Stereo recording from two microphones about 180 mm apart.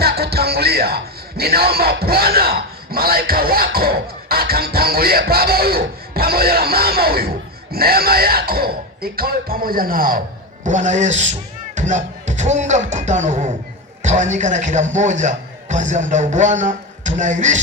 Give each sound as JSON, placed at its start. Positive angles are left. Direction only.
{"t": 0.0, "sound": "a man's voice", "side_deg": -60}